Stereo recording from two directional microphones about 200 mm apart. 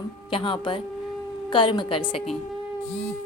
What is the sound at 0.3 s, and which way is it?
Speech, 25° left (ahead or behind).